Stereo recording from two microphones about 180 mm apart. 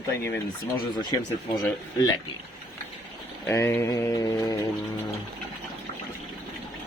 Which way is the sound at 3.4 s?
15° left (ahead or behind).